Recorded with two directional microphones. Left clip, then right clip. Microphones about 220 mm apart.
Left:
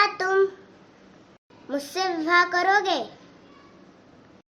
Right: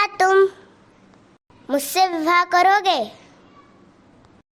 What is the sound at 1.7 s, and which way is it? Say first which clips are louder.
A child's voice: right 8 dB; 45° right (ahead or behind).